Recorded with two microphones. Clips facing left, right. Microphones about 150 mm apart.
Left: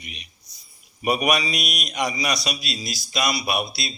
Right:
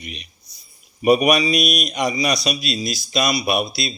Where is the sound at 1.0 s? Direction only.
25° right (ahead or behind).